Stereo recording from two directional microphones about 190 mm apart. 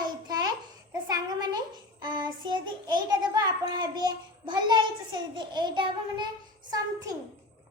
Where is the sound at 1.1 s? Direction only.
20° right (ahead or behind).